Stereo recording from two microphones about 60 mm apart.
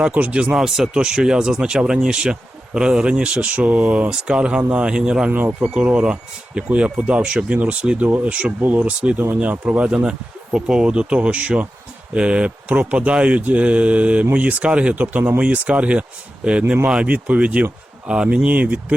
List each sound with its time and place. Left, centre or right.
0.0 s speech: right
0.5 s speech: centre
18.4 s speech: right